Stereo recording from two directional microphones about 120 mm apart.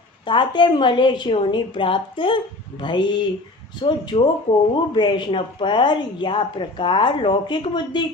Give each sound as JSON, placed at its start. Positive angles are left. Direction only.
{"t": 0.3, "sound": "speech", "side_deg": 40}